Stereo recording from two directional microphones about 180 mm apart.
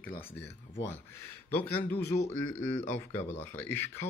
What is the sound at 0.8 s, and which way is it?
Speech, 15° left (ahead or behind).